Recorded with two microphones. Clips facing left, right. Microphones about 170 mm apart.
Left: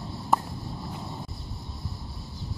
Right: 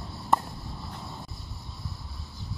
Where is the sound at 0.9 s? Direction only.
15° left (ahead or behind).